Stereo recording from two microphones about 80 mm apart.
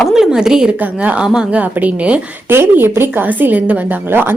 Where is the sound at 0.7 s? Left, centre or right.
Centre.